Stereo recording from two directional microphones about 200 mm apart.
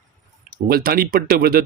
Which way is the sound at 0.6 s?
50° right (ahead or behind).